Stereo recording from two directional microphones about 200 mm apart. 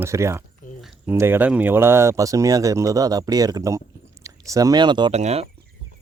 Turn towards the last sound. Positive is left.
turn(degrees=-30)  # may be behind; listen again after turning